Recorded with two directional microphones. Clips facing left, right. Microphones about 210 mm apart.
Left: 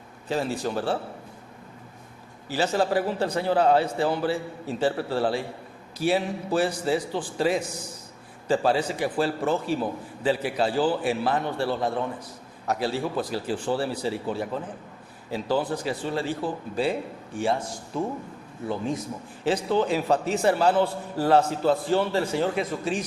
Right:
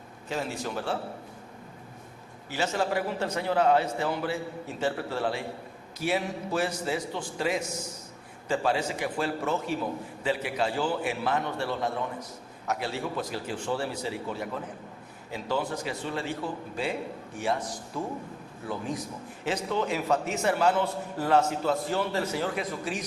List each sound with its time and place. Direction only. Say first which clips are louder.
0.3 s a man's voice: left 5 dB; 35° left (ahead or behind)
2.5 s a man's voice: left 5 dB; 35° left (ahead or behind)
19.5 s a man's voice: left 5 dB; 30° left (ahead or behind)